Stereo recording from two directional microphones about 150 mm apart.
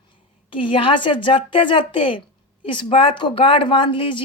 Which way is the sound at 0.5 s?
35° left (ahead or behind).